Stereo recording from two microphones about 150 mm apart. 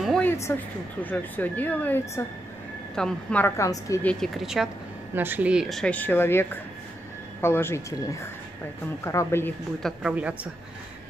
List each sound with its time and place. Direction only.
0.2 s speech: 15° left (ahead or behind)
4.0 s speech: 5° left (ahead or behind)
5.1 s speech: 15° right (ahead or behind); by 9.5 s 15° left (ahead or behind)
9.8 s speech: 5° left (ahead or behind)
10.1 s a woman's voice: 10° right (ahead or behind)